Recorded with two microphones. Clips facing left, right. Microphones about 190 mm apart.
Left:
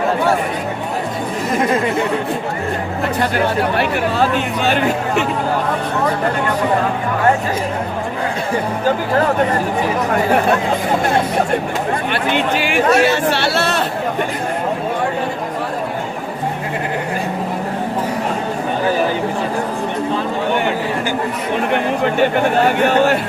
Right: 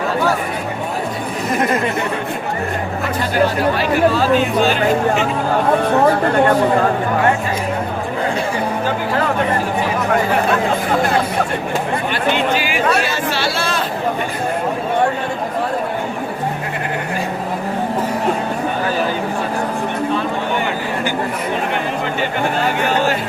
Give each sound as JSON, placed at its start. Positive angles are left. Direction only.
{"t": 12.1, "sound": "speech", "side_deg": 55}
{"t": 22.0, "sound": "speech", "side_deg": 55}